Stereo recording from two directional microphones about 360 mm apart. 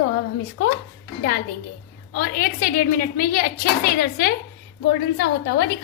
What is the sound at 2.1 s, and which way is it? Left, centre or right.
A woman's voice, left.